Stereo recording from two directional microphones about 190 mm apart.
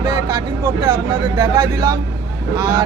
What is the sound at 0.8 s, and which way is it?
Speech, 20° right (ahead or behind).